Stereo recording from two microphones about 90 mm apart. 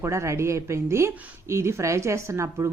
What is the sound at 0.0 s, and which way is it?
Speech, 30° right (ahead or behind).